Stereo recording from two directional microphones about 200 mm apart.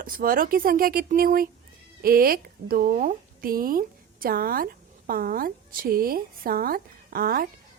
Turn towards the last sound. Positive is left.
turn(degrees=-50)  # may be behind; listen again after turning